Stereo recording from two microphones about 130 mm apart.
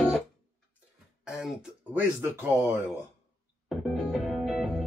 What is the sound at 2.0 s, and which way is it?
Speech, 20° right (ahead or behind).